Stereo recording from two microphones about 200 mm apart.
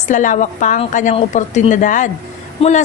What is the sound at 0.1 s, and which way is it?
A woman's voice, 40° left (ahead or behind).